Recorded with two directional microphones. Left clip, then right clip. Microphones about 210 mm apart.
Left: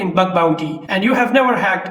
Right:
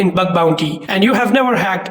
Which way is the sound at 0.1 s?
40° right (ahead or behind).